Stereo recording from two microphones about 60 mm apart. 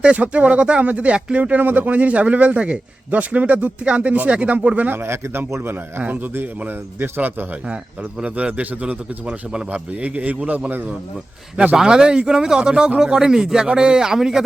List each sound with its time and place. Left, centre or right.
0.0 s speech: right
4.9 s speech: right
6.0 s a man's voice: right
8.2 s speech: right
10.7 s a man's voice: right
11.8 s a man's voice: centre